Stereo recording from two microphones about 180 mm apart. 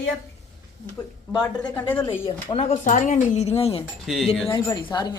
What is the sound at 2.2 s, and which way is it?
Speech, 35° left (ahead or behind).